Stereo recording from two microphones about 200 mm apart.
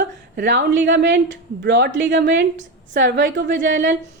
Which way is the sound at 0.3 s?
60° right (ahead or behind).